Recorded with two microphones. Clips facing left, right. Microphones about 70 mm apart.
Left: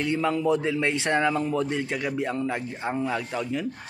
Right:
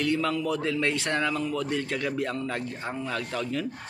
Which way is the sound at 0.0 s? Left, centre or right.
Left.